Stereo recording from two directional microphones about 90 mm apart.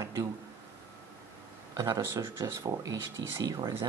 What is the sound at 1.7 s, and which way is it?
Speech, 35° right (ahead or behind).